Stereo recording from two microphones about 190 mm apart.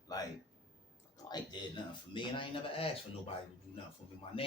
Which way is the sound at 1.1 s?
20° left (ahead or behind).